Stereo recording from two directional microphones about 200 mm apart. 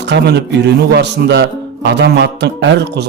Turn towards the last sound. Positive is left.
turn(degrees=-60)  # may be behind; listen again after turning